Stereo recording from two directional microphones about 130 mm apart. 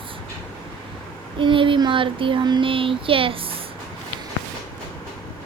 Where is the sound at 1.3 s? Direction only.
40° right (ahead or behind).